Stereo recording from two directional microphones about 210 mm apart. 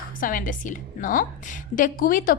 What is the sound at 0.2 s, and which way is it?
A woman's voice, 40° left (ahead or behind).